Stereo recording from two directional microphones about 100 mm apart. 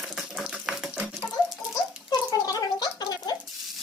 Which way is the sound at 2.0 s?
40° left (ahead or behind).